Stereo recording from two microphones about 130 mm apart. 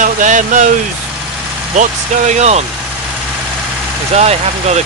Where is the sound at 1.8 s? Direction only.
65° right (ahead or behind).